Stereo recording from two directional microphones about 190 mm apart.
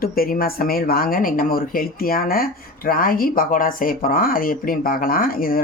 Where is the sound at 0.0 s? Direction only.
50° left (ahead or behind).